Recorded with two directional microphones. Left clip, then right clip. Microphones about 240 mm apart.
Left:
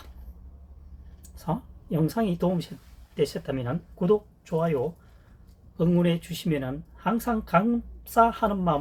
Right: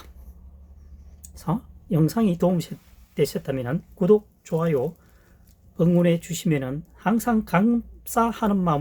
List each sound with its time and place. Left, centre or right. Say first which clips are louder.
1.4 s speech: right 2 dB; right